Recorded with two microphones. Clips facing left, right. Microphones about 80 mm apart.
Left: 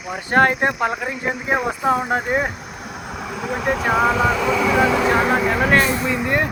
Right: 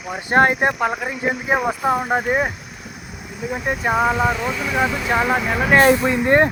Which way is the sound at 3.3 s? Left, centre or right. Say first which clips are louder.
Left 2 dB; left.